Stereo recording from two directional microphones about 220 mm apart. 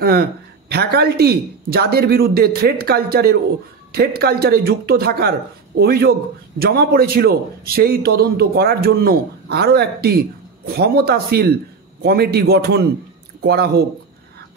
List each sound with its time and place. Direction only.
0.0 s a man's voice: 45° right (ahead or behind)